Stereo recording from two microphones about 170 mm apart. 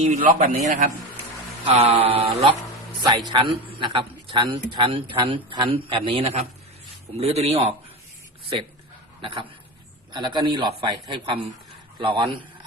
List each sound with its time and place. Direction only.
0.0 s a man's voice: 50° right (ahead or behind)
1.7 s a man's voice: 35° right (ahead or behind)
9.2 s a man's voice: 30° right (ahead or behind)